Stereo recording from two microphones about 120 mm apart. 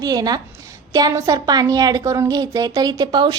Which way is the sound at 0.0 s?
30° right (ahead or behind).